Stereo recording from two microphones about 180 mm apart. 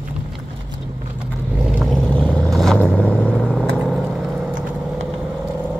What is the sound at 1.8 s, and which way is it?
Vehicle, 5° left (ahead or behind).